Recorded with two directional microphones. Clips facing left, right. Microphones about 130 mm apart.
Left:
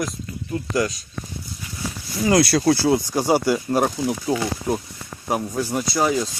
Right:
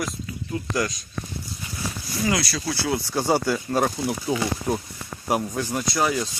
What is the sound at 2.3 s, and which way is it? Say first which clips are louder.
Speech: left 12 dB; 55° left (ahead or behind).